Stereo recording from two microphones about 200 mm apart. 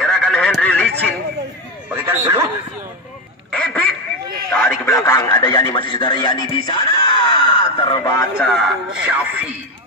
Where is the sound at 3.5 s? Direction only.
5° left (ahead or behind).